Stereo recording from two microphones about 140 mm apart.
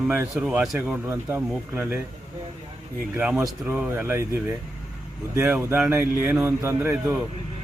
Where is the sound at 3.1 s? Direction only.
10° right (ahead or behind).